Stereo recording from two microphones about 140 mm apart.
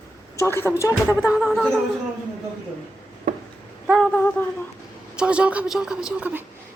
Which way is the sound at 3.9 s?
Centre (ahead or behind).